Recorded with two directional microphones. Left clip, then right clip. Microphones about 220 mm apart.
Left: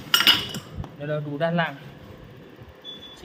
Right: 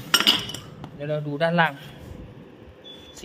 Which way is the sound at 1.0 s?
30° right (ahead or behind).